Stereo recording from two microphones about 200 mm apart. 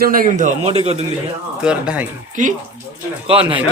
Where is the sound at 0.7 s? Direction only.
30° right (ahead or behind).